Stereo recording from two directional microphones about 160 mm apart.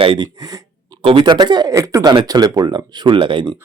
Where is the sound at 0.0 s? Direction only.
30° right (ahead or behind).